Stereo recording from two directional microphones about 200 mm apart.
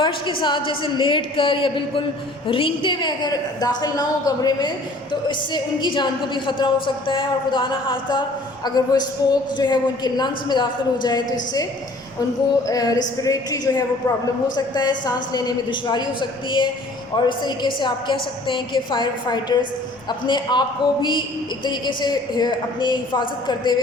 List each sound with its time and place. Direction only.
0.0 s a man's voice: 25° left (ahead or behind)
12.6 s a sound: 20° left (ahead or behind)
13.2 s a man's voice: 20° left (ahead or behind)
17.2 s a man's voice: 20° left (ahead or behind)